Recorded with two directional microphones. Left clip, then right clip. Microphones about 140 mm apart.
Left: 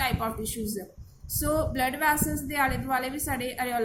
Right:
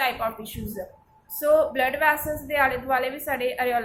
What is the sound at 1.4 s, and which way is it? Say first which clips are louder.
A woman's voice: right 7 dB; 40° left (ahead or behind).